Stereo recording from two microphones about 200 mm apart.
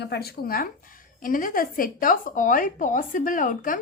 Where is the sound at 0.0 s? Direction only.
55° left (ahead or behind).